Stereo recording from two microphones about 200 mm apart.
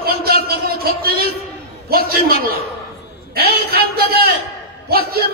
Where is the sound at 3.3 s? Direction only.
50° right (ahead or behind).